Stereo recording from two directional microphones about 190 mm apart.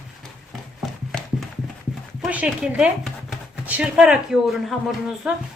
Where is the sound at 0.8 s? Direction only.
Centre (ahead or behind).